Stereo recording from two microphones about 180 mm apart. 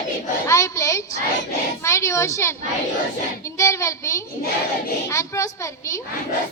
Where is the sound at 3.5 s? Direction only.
15° left (ahead or behind).